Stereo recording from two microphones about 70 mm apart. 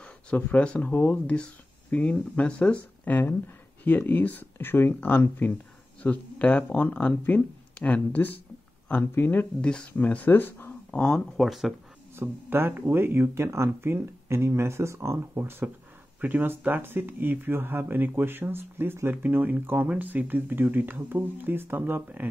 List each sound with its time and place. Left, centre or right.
0.0 s speech: centre
9.6 s speech: centre
10.9 s speech: centre
12.2 s speech: right
16.2 s speech: right